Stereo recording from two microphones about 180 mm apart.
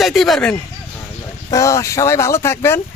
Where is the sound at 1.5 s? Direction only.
20° left (ahead or behind).